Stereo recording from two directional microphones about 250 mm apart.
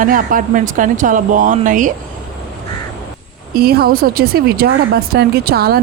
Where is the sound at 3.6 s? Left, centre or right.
Right.